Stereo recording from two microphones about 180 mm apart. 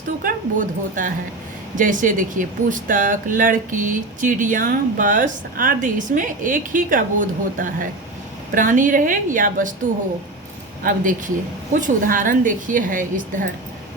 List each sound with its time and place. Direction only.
0.2 s speech: 50° right (ahead or behind)
10.8 s speech: 50° right (ahead or behind)